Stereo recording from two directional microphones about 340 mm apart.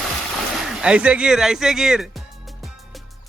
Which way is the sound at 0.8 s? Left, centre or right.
Centre.